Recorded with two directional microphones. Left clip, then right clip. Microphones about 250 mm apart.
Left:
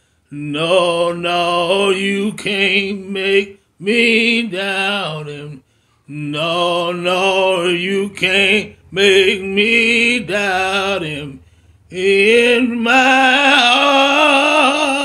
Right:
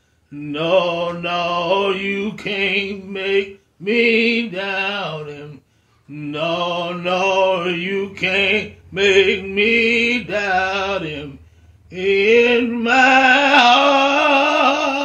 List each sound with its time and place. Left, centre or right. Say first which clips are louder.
0.5 s mantra: left 3 dB; left
6.3 s music: left 4 dB; left